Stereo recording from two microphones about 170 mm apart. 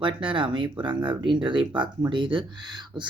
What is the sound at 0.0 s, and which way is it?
Speech, 30° right (ahead or behind).